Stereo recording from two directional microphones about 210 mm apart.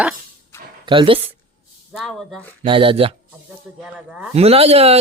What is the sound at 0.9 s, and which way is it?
Speech, 25° right (ahead or behind).